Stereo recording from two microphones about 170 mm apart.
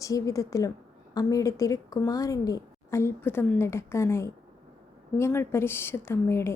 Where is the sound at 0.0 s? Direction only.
20° left (ahead or behind).